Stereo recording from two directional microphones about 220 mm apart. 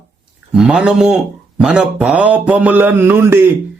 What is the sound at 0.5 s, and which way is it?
Speech, 5° right (ahead or behind).